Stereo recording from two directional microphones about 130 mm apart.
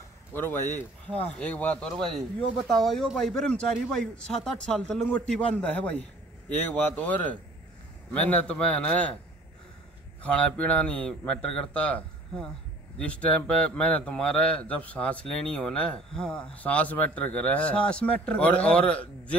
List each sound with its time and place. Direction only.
0.3 s a man's voice: 15° left (ahead or behind)
10.2 s speech: 10° left (ahead or behind)